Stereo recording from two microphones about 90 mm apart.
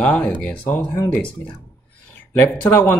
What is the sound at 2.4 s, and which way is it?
Speech, 25° left (ahead or behind).